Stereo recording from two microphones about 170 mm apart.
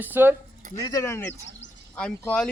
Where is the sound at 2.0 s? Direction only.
5° left (ahead or behind).